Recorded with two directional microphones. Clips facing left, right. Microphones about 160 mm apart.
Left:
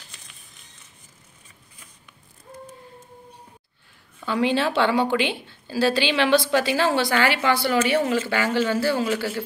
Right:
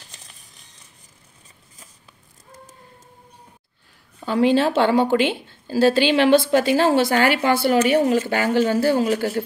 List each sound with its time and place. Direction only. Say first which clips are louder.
4.2 s a woman's voice: right 5 dB; 40° right (ahead or behind)